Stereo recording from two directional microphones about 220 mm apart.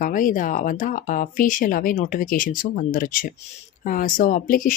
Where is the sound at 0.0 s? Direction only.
40° left (ahead or behind).